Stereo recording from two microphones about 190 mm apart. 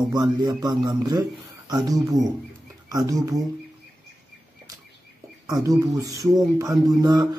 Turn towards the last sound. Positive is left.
turn(degrees=-20)  # may be behind; listen again after turning